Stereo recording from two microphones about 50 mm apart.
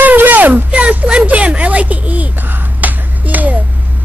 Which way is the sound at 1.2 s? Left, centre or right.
Right.